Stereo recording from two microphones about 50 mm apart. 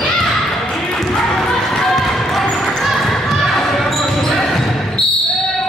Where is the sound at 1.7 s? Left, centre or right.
Centre.